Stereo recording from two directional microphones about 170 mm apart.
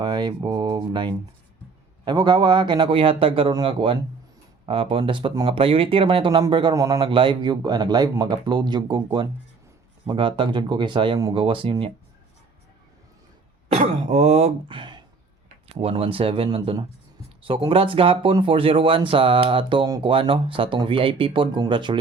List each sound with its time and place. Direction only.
0.0 s speech: 25° right (ahead or behind)
7.0 s speech: 30° right (ahead or behind)
10.1 s speech: 30° right (ahead or behind)
13.7 s throat clearing: 35° right (ahead or behind)
15.7 s speech: 35° right (ahead or behind)